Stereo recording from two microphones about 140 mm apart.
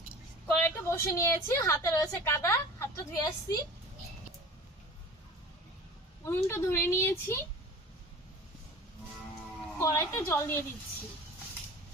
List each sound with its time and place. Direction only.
0.4 s a woman's voice: 15° left (ahead or behind)
6.2 s a woman's voice: 20° left (ahead or behind)
9.7 s a woman's voice: 20° left (ahead or behind)